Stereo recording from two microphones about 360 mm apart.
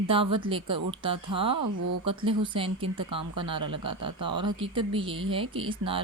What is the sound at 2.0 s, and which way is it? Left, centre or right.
Speech, centre.